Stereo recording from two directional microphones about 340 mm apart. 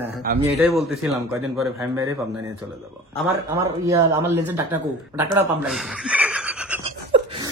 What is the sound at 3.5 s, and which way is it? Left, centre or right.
Speech, centre.